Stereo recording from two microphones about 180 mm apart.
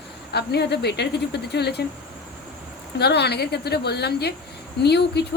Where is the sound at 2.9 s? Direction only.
65° left (ahead or behind).